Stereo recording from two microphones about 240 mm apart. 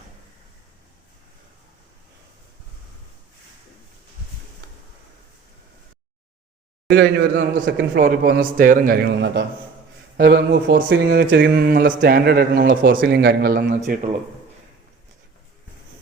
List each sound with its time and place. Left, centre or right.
6.9 s a man's voice: right